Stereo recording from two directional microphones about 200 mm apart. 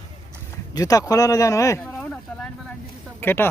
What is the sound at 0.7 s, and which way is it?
Speech, 15° left (ahead or behind).